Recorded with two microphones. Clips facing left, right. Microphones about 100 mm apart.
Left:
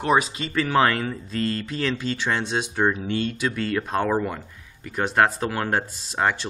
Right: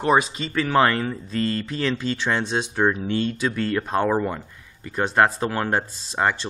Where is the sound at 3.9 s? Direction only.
15° right (ahead or behind).